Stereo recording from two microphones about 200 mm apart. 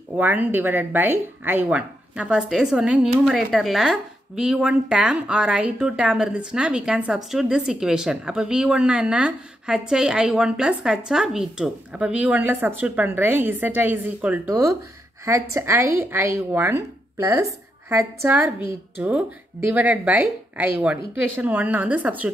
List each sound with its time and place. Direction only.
0.1 s a woman's voice: 10° right (ahead or behind)